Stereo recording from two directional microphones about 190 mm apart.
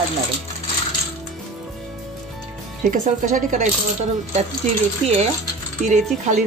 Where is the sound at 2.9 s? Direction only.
40° right (ahead or behind).